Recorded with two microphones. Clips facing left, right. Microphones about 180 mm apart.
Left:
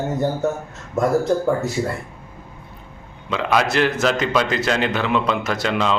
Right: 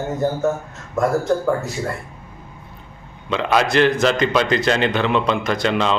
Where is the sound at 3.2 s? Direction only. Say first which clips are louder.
Right 1 dB; 5° left (ahead or behind).